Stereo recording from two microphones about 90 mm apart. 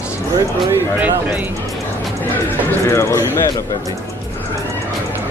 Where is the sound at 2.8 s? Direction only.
30° left (ahead or behind).